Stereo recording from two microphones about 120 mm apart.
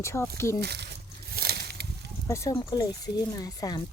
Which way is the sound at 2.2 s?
25° left (ahead or behind).